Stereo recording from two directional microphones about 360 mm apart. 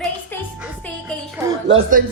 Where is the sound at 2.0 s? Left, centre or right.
Right.